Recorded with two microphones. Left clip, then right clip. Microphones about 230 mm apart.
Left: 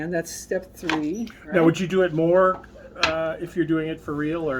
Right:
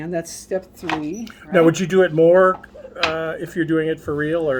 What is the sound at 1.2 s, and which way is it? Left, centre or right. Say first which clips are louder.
Speech: right 6 dB; right.